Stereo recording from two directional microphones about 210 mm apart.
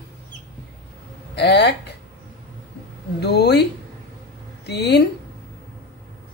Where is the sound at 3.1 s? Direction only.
50° left (ahead or behind).